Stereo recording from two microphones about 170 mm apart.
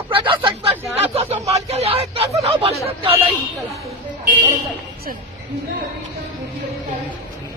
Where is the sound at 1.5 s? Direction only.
35° right (ahead or behind).